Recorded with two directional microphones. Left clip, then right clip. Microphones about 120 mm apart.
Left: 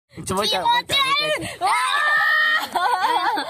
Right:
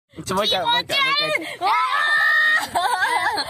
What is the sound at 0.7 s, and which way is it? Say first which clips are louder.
Speech: left 1 dB; 35° left (ahead or behind).